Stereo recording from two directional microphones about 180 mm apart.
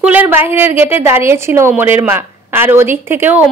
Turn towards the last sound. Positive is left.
turn(degrees=-10)  # may be behind; listen again after turning